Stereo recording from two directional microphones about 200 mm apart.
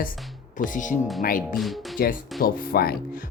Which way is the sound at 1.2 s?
45° left (ahead or behind).